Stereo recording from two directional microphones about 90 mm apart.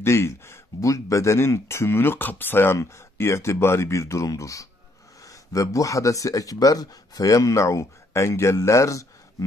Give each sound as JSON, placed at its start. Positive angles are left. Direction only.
{"t": 0.0, "sound": "speech", "side_deg": 30}